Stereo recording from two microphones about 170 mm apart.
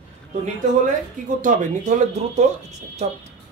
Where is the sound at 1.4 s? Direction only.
45° right (ahead or behind).